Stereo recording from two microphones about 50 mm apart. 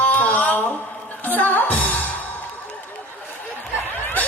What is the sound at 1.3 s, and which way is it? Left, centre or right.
Music, left.